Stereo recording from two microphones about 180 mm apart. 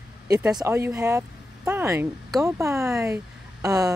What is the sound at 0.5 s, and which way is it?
Speech, 15° right (ahead or behind).